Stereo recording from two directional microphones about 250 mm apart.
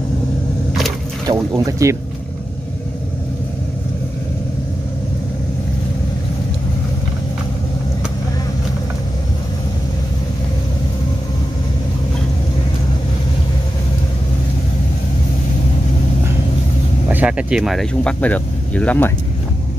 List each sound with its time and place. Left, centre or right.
1.2 s speech: centre
17.1 s speech: centre